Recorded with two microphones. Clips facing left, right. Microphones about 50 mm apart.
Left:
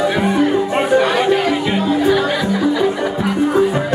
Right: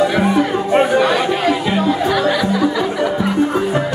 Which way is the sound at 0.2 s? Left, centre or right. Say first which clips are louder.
Even; right.